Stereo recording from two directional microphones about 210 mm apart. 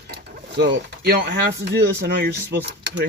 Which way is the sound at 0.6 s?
50° right (ahead or behind).